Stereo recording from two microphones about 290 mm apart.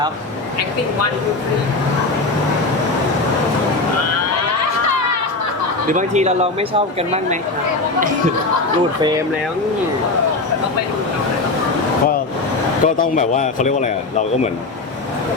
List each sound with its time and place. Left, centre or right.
5.9 s speech: right
9.0 s speech: centre
12.8 s speech: left